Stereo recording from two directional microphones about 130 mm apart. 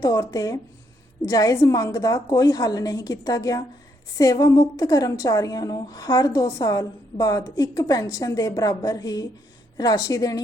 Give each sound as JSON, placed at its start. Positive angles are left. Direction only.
{"t": 0.0, "sound": "a woman's voice", "side_deg": 30}